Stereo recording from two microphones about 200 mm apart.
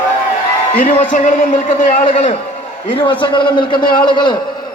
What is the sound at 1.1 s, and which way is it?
A man's voice, 40° left (ahead or behind).